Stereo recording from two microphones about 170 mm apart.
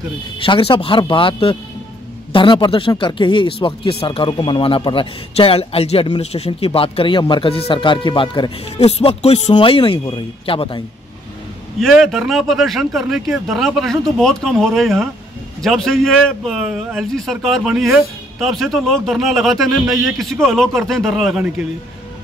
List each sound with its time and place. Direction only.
0.4 s speech: 30° left (ahead or behind)
11.8 s speech: centre (ahead or behind)